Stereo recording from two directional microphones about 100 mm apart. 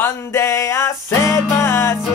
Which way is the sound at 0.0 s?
25° left (ahead or behind).